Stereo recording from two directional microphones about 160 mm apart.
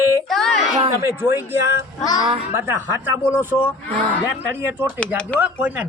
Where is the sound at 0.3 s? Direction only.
Centre (ahead or behind).